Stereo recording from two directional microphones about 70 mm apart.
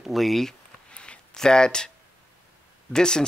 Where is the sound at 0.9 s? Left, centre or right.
Centre.